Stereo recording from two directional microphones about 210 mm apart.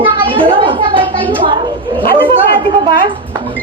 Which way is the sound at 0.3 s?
25° right (ahead or behind).